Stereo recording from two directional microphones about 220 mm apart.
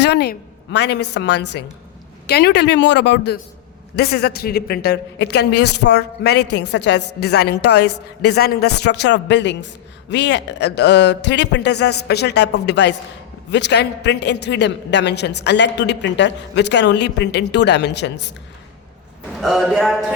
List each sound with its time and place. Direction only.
0.0 s a woman's voice: 50° left (ahead or behind)
19.4 s speech: centre (ahead or behind)